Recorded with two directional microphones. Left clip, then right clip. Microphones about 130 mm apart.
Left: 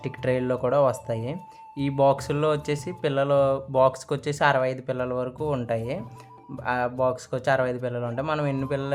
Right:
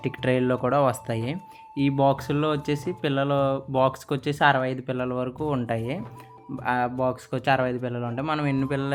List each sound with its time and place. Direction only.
0.3 s speech: 5° right (ahead or behind)
3.1 s speech: 15° right (ahead or behind)
3.3 s speech: 5° right (ahead or behind)
5.6 s speech: 20° right (ahead or behind)
6.7 s speech: 10° right (ahead or behind)